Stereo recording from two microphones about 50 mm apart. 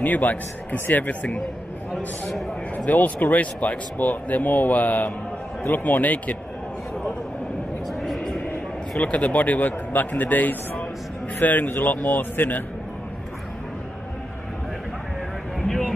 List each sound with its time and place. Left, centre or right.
0.0 s speech: left
2.8 s speech: left
7.9 s a sound: centre
9.0 s speech: left